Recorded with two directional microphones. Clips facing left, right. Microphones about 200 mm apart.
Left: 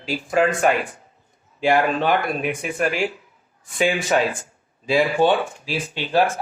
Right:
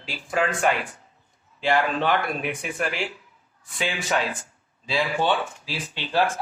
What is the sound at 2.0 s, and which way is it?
Speech, 15° left (ahead or behind).